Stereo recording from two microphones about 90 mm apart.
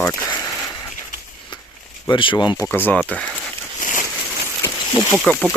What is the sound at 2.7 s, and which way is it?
Speech, 20° left (ahead or behind).